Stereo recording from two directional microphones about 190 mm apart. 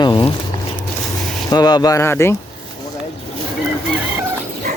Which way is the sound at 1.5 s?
20° left (ahead or behind).